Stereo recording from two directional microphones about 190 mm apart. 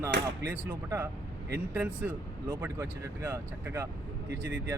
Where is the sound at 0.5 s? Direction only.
10° right (ahead or behind).